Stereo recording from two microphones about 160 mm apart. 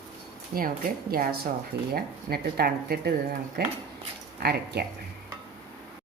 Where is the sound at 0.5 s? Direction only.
70° right (ahead or behind).